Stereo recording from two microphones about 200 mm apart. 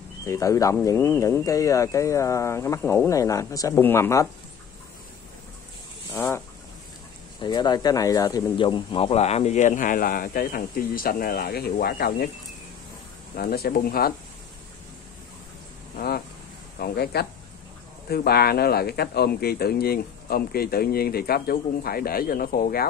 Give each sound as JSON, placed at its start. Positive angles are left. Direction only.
{"t": 0.3, "sound": "speech", "side_deg": 15}
{"t": 6.1, "sound": "speech", "side_deg": 10}
{"t": 7.4, "sound": "speech", "side_deg": 20}
{"t": 13.4, "sound": "speech", "side_deg": 50}
{"t": 16.7, "sound": "speech", "side_deg": 50}